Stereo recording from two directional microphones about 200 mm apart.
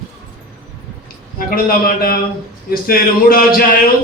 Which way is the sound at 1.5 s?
45° left (ahead or behind).